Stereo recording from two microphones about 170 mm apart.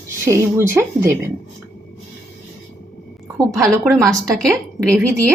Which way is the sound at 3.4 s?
15° right (ahead or behind).